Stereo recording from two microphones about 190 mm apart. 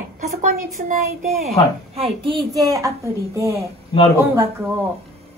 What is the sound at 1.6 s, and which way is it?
Speech, 20° left (ahead or behind).